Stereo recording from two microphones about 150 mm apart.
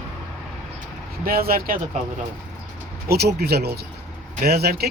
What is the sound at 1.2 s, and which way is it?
Speech, 80° right.